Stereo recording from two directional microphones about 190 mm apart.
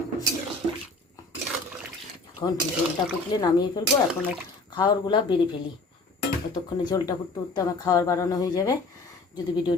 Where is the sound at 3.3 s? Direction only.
20° left (ahead or behind).